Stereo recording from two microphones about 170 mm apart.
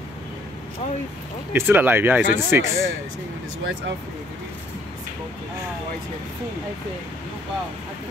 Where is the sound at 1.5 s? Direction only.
10° right (ahead or behind).